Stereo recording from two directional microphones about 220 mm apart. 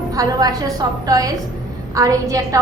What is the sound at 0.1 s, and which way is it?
A woman's voice, 15° right (ahead or behind).